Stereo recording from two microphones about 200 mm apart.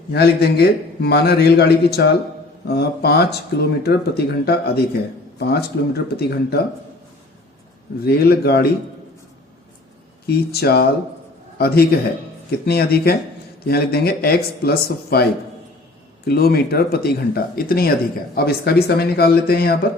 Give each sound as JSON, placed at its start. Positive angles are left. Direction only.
{"t": 0.1, "sound": "speech", "side_deg": 55}
{"t": 8.0, "sound": "speech", "side_deg": 50}
{"t": 10.2, "sound": "a man's voice", "side_deg": 55}